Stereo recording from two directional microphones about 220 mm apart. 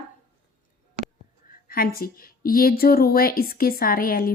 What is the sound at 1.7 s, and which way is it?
A woman's voice, 40° left (ahead or behind).